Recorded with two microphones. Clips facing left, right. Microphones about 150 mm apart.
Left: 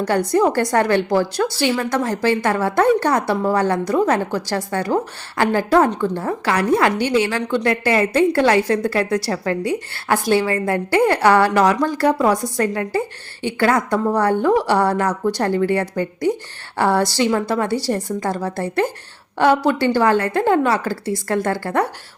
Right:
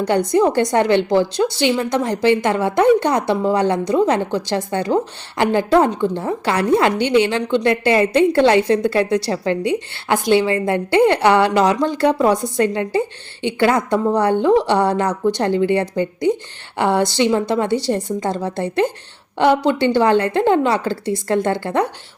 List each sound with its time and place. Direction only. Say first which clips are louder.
0.1 s a woman's voice: right 1 dB; 20° right (ahead or behind)